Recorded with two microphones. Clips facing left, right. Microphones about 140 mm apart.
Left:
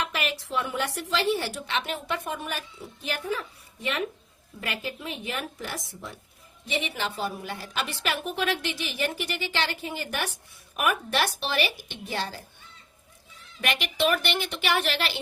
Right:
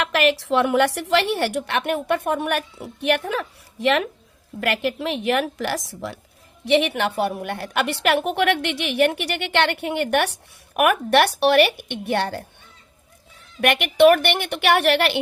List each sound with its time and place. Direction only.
0.0 s a woman's voice: 75° right (ahead or behind); by 4.0 s 90° right
4.6 s a woman's voice: 75° right (ahead or behind)
6.7 s a woman's voice: 70° right (ahead or behind)
13.6 s a woman's voice: 60° right (ahead or behind)